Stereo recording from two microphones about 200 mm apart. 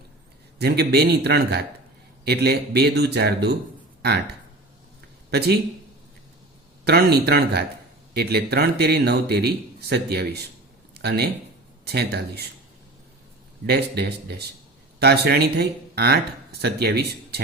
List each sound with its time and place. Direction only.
0.6 s speech: 55° right (ahead or behind)
6.8 s speech: 55° right (ahead or behind)
13.7 s speech: 55° right (ahead or behind)